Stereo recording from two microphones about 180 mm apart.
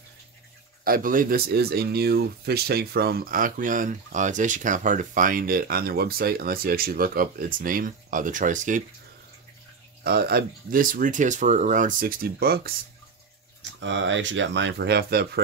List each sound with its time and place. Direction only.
0.8 s speech: 50° right (ahead or behind)
10.0 s speech: 55° right (ahead or behind)
13.6 s speech: 90° right; by 15.4 s 60° right (ahead or behind)